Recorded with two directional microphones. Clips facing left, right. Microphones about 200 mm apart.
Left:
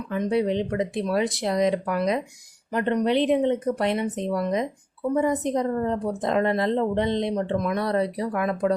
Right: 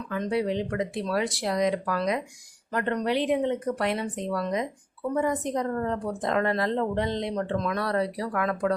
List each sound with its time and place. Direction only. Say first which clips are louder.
0.1 s speech: left 4 dB; 20° left (ahead or behind)